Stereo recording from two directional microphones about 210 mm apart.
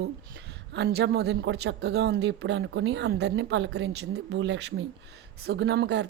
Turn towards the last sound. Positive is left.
turn(degrees=-55)  # may be behind; listen again after turning